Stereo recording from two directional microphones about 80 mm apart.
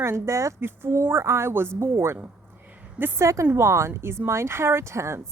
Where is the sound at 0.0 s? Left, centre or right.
Right.